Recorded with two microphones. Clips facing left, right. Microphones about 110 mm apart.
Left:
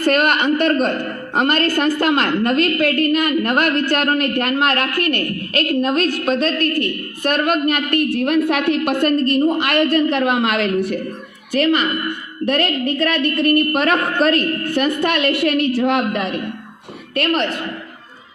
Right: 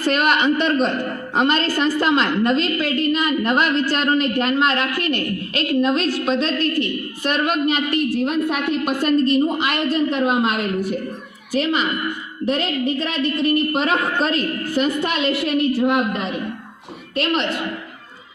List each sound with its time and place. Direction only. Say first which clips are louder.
0.0 s a woman's voice: left 2 dB; 50° left (ahead or behind)
8.4 s a woman's voice: left 4 dB; 75° left (ahead or behind)
8.9 s a woman's voice: right 3 dB; 55° left (ahead or behind)
17.2 s a woman's voice: left 2 dB; 50° left (ahead or behind)